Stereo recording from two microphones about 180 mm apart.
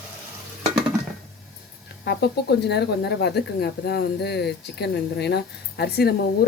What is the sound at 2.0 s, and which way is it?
Speech, 65° left (ahead or behind).